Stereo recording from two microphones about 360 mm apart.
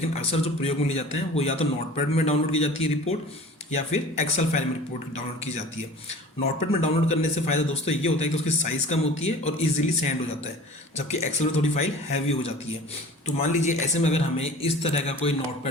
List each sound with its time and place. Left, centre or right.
0.1 s a man's voice: centre
6.7 s a man's voice: centre